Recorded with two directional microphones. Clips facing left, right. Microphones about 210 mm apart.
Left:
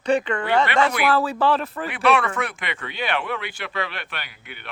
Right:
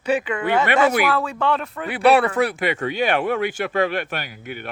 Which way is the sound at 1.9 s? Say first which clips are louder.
Right 5 dB; 35° right (ahead or behind).